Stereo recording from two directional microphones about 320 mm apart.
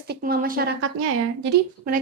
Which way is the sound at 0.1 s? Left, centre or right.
Right.